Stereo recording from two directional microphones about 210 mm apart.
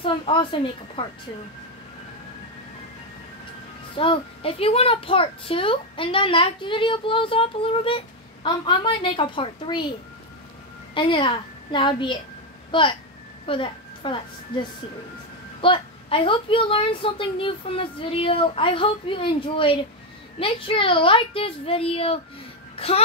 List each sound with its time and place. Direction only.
0.0 s a child's voice: 25° left (ahead or behind)
3.9 s a child's voice: 25° left (ahead or behind)
11.0 s a child's voice: 25° left (ahead or behind)